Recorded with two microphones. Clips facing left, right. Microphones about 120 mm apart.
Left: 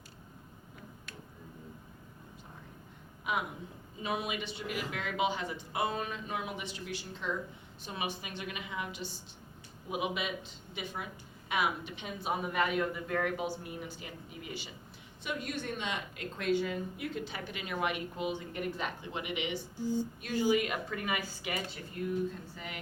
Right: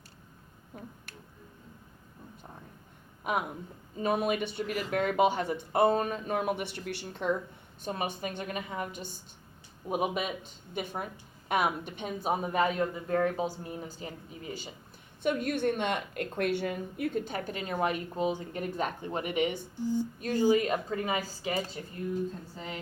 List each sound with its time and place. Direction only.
4.0 s a woman's voice: 45° right (ahead or behind)
7.9 s a woman's voice: 45° right (ahead or behind)
15.2 s a woman's voice: 50° right (ahead or behind)
20.2 s a woman's voice: 35° right (ahead or behind)